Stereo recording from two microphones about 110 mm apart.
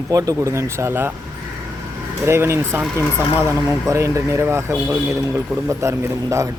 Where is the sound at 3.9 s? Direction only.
25° right (ahead or behind).